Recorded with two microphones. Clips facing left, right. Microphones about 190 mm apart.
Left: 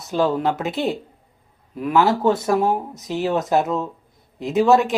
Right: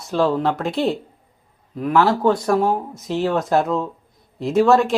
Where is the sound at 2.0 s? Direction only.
20° left (ahead or behind).